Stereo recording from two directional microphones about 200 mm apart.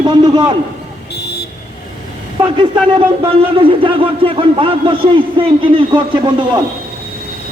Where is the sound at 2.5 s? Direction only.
25° right (ahead or behind).